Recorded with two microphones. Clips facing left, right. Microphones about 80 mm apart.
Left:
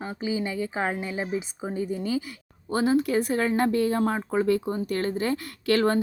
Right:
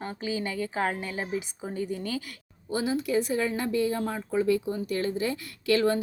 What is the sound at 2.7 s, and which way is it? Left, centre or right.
A woman's voice, left.